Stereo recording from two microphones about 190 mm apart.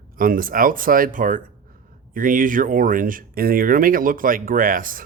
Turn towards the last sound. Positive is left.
turn(degrees=-45)  # may be behind; listen again after turning